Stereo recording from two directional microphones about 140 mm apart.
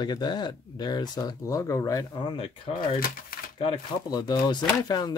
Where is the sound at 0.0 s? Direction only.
30° left (ahead or behind).